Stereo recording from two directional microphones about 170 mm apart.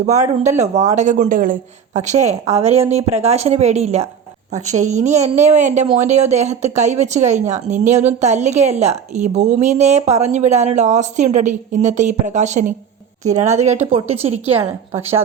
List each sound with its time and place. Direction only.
0.0 s a woman's voice: 40° right (ahead or behind)